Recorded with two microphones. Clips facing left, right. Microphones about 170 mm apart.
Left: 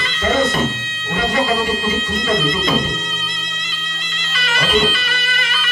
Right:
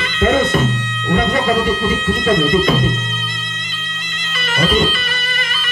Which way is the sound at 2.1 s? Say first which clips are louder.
Right 6 dB; 55° right (ahead or behind).